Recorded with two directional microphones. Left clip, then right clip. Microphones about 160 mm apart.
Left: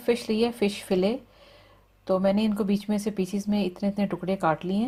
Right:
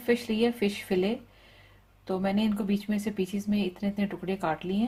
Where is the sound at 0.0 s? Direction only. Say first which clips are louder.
Left 2 dB; 50° left (ahead or behind).